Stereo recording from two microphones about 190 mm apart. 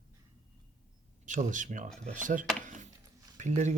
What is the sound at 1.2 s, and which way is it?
Speech, 40° right (ahead or behind).